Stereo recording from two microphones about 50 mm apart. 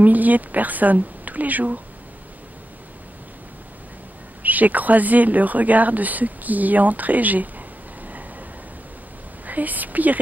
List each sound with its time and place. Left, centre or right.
0.0 s speech: right
4.4 s speech: right
9.5 s speech: right